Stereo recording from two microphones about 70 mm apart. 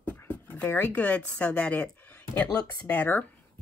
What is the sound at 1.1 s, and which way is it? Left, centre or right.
Speech, left.